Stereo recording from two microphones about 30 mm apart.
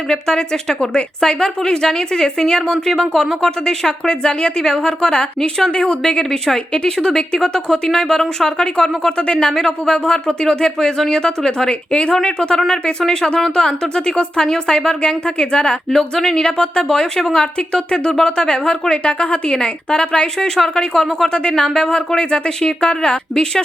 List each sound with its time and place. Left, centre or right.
0.1 s a woman's voice: left
5.7 s a woman's voice: left
7.3 s speech: centre
8.5 s a woman's voice: left
9.5 s a woman's voice: left
15.9 s a woman's voice: centre; by 19.5 s left
19.5 s a woman's voice: left